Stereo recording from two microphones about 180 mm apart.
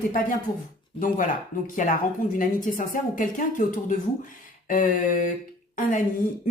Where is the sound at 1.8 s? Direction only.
45° left (ahead or behind).